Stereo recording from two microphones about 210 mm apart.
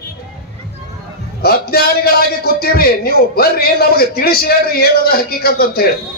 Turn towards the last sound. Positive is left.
turn(degrees=45)  # may be behind; listen again after turning